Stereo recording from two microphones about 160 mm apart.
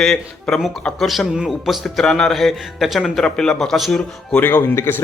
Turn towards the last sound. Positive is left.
turn(degrees=15)  # may be behind; listen again after turning